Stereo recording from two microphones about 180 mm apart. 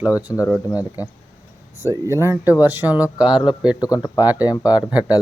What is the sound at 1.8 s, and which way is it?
Speech, 15° right (ahead or behind).